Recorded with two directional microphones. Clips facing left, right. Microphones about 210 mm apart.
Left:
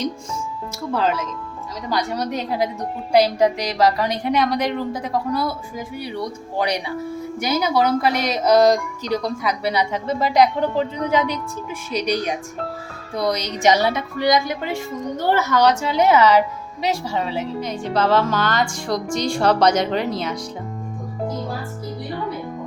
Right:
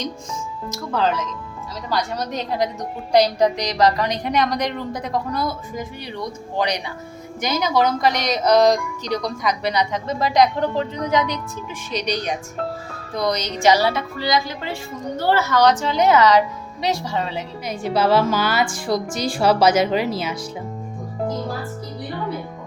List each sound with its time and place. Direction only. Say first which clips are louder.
0.9 s a woman's voice: even; 5° left (ahead or behind)
13.6 s speech: right 1 dB; 20° left (ahead or behind)
17.6 s speech: right 2 dB; 10° right (ahead or behind)